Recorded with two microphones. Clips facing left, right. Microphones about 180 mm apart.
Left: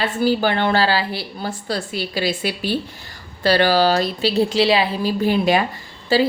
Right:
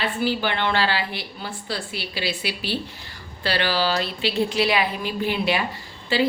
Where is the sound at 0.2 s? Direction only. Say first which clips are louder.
Left 7 dB; 40° left (ahead or behind).